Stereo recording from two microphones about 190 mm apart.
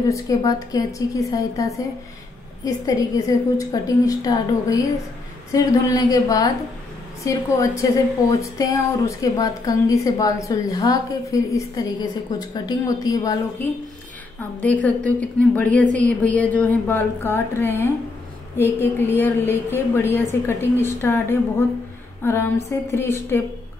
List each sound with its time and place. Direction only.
0.1 s a woman's voice: 20° left (ahead or behind)